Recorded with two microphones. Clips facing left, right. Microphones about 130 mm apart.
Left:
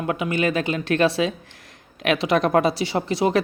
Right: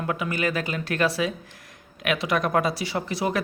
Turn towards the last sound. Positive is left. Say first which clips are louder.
# left 5 dB
turn(degrees=25)  # may be behind; listen again after turning